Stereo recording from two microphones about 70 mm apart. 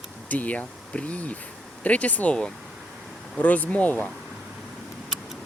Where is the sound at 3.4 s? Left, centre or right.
Left.